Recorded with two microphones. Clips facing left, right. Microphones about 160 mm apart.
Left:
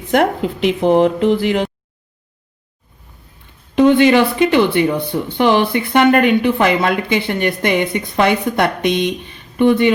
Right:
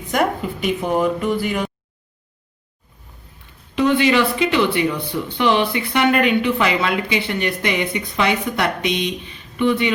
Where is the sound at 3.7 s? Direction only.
55° left (ahead or behind).